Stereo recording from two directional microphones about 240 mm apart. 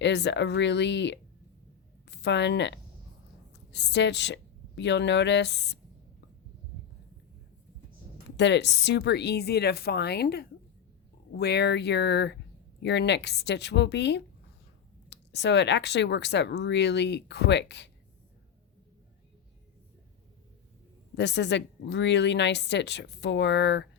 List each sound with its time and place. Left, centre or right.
0.0 s a woman's voice: left
8.4 s speech: left
21.2 s speech: left